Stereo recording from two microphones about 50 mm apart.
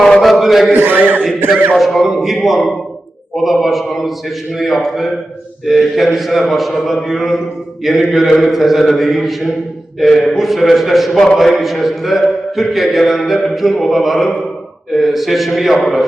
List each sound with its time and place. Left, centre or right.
0.2 s mantra: centre
0.7 s a man's voice: right
1.8 s a man's voice: centre